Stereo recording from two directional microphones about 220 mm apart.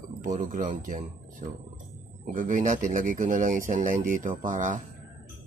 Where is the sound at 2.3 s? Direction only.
35° right (ahead or behind).